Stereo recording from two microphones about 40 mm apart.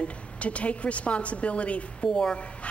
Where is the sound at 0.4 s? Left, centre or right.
Left.